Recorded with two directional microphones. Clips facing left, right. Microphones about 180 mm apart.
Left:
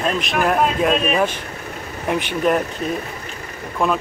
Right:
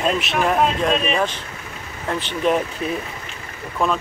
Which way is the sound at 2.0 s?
15° left (ahead or behind).